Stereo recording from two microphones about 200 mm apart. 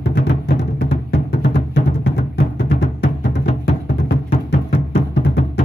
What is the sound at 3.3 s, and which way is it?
Music, 60° left (ahead or behind).